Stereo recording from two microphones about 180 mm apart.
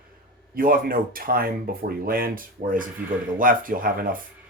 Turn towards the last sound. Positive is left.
turn(degrees=-50)  # may be behind; listen again after turning